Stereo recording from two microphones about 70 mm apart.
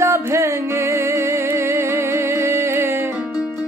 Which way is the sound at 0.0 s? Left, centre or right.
Right.